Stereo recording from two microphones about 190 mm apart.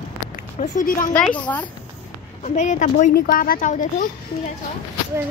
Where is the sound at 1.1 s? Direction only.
5° left (ahead or behind).